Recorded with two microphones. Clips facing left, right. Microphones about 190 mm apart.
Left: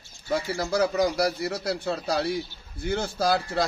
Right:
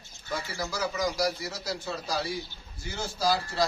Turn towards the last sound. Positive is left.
turn(degrees=55)  # may be behind; listen again after turning